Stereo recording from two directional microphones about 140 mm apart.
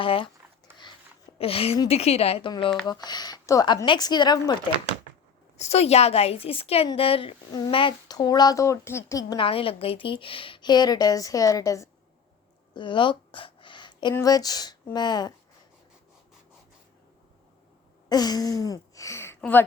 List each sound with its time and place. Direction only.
0.0 s speech: 40° left (ahead or behind)
1.4 s a woman's voice: 45° left (ahead or behind)
2.8 s speech: 30° left (ahead or behind)
5.5 s a woman's voice: 50° left (ahead or behind); by 9.4 s 25° left (ahead or behind)
9.4 s a woman's voice: 40° left (ahead or behind); by 11.9 s 25° left (ahead or behind)
12.7 s a sound: 35° left (ahead or behind)
14.1 s speech: 25° left (ahead or behind)
18.1 s a sound: 30° left (ahead or behind)
19.4 s speech: 10° left (ahead or behind)